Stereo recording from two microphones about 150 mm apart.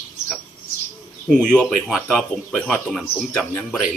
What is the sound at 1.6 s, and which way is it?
Speech, 5° left (ahead or behind).